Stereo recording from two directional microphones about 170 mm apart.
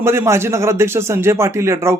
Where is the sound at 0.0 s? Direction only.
15° right (ahead or behind).